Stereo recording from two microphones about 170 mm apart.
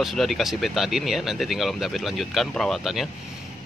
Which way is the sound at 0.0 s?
Centre (ahead or behind).